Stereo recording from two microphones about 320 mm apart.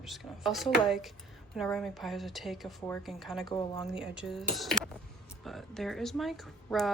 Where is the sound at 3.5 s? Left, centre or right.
Centre.